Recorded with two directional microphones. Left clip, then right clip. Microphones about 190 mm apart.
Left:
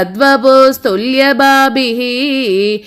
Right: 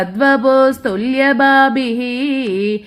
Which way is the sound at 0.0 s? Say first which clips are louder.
Left 4 dB; 20° left (ahead or behind).